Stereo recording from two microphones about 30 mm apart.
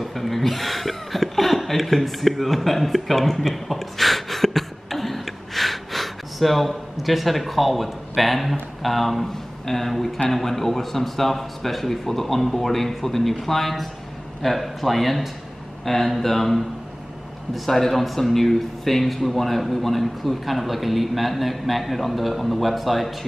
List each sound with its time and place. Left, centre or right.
0.0 s chuckle: centre
7.0 s a man's voice: centre
17.6 s a man's voice: centre